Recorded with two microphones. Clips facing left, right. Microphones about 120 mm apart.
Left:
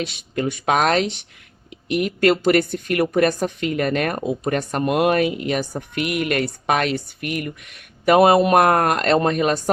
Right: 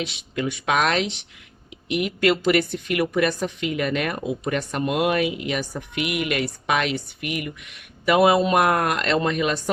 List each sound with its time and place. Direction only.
0.0 s a woman's voice: 45° left (ahead or behind)